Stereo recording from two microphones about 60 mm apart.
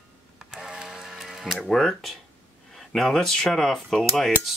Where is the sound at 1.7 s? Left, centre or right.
Centre.